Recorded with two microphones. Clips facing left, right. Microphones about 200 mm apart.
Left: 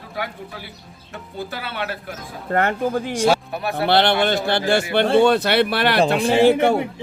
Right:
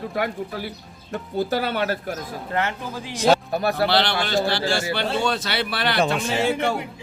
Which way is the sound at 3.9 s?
55° left (ahead or behind).